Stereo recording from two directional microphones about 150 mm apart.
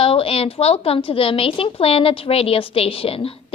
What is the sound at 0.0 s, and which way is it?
A woman's voice, 40° left (ahead or behind).